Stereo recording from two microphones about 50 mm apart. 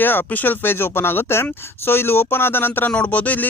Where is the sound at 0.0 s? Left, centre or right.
Left.